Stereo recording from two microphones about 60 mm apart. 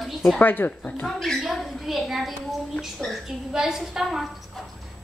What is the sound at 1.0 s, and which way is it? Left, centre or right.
Speech, centre.